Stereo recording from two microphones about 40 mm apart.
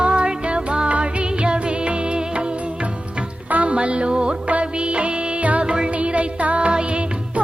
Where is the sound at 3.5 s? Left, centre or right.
Right.